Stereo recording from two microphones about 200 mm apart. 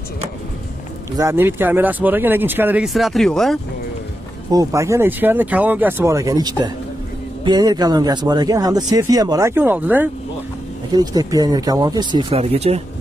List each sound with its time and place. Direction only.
1.1 s speech: 15° right (ahead or behind)
4.5 s speech: 15° right (ahead or behind)
10.9 s speech: 20° right (ahead or behind)